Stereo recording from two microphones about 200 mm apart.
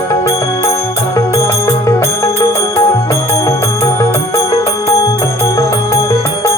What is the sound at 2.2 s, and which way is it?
Music, 15° left (ahead or behind).